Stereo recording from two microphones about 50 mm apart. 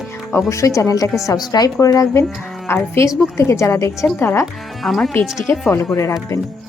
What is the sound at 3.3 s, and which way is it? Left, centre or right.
Speech, left.